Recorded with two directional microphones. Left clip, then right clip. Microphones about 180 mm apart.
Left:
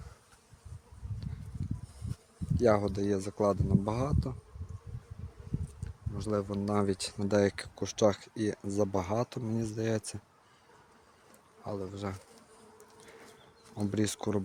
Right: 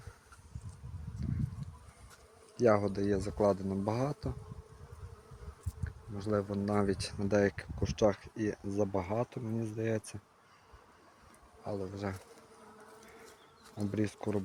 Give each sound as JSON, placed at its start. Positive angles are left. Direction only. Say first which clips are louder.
{"t": 2.6, "sound": "speech", "louder": "left 1 dB", "side_deg": 20}
{"t": 5.8, "sound": "speech", "louder": "right 2 dB", "side_deg": 10}
{"t": 11.6, "sound": "speech", "louder": "even", "side_deg": 20}
{"t": 13.7, "sound": "speech", "louder": "left 3 dB", "side_deg": 30}